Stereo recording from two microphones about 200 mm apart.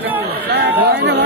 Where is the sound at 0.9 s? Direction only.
60° right (ahead or behind).